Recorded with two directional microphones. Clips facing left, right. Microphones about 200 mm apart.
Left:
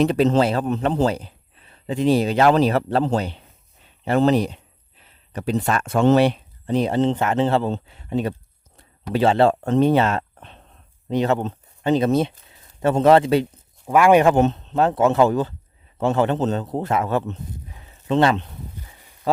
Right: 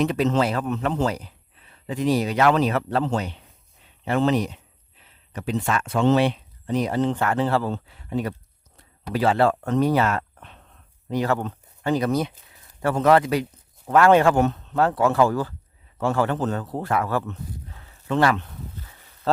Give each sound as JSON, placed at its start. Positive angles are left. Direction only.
{"t": 0.0, "sound": "a man's voice", "side_deg": 30}
{"t": 13.8, "sound": "a man's voice", "side_deg": 15}